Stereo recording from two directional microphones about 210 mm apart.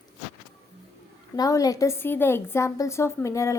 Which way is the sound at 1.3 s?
15° left (ahead or behind).